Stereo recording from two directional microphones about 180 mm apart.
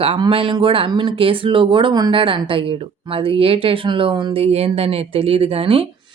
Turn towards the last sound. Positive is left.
turn(degrees=-30)  # may be behind; listen again after turning